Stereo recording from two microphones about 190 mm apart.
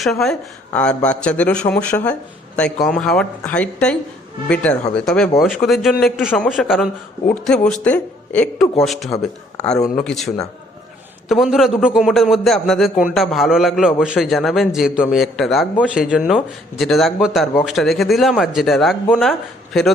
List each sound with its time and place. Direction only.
0.0 s a man's voice: centre (ahead or behind)
11.3 s a man's voice: centre (ahead or behind)